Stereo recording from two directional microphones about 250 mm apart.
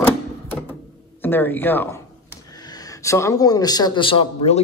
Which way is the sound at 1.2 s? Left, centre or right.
Centre.